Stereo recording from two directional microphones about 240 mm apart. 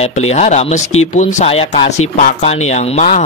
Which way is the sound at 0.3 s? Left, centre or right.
Left.